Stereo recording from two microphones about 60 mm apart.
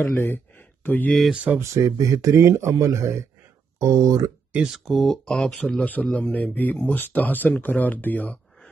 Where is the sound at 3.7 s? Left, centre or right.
Right.